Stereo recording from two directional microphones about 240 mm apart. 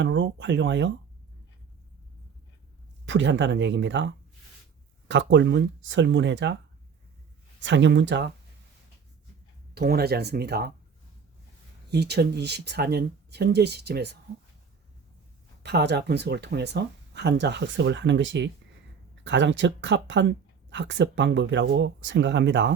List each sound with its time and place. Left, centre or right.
0.0 s speech: right
3.1 s speech: right
7.6 s speech: right
9.7 s speech: right
11.9 s speech: right
15.6 s speech: right